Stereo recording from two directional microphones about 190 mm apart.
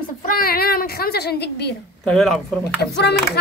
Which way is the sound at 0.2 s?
50° left (ahead or behind).